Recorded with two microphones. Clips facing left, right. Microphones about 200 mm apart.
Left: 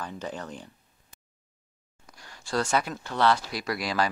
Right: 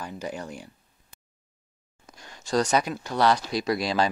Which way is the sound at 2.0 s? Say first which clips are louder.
Right 4 dB; 20° right (ahead or behind).